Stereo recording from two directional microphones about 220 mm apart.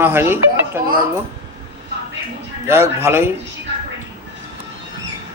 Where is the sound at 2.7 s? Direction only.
10° right (ahead or behind).